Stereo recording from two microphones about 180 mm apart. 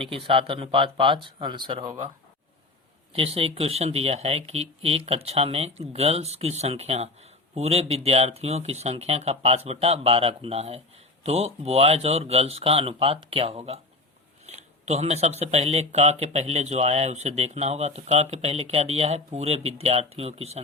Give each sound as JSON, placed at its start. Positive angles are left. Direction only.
{"t": 0.0, "sound": "speech", "side_deg": -30}
{"t": 3.1, "sound": "speech", "side_deg": -35}